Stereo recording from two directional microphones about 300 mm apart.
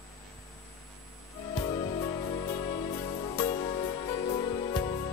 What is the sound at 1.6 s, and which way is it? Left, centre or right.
Music, centre.